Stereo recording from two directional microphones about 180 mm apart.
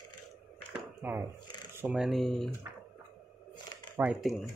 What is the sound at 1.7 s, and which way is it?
Speech, 10° right (ahead or behind).